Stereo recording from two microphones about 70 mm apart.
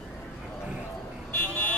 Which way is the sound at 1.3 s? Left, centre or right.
Left.